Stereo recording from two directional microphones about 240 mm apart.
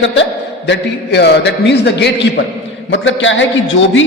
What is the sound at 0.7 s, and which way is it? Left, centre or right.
A man's voice, left.